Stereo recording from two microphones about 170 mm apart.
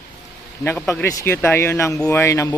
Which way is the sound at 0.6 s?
10° left (ahead or behind).